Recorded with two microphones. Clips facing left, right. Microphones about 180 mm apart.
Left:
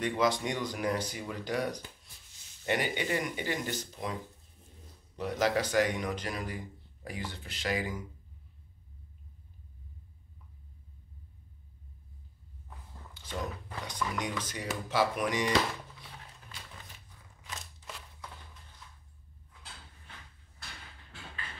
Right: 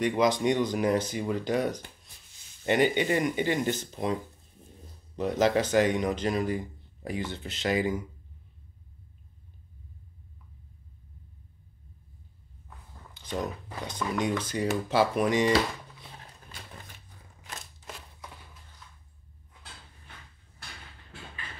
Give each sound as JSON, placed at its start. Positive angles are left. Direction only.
{"t": 0.0, "sound": "speech", "side_deg": -20}
{"t": 5.1, "sound": "speech", "side_deg": -25}
{"t": 13.1, "sound": "a sound", "side_deg": -20}
{"t": 13.8, "sound": "speech", "side_deg": -25}